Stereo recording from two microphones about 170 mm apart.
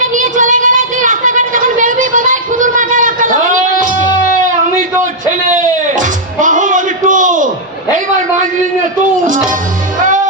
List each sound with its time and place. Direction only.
0.0 s a sound: 50° right (ahead or behind)
5.9 s music: 50° right (ahead or behind)
9.2 s speech: 50° right (ahead or behind)
10.0 s music: 50° right (ahead or behind)